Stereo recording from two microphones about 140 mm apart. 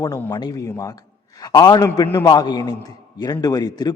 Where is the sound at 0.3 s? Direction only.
30° left (ahead or behind).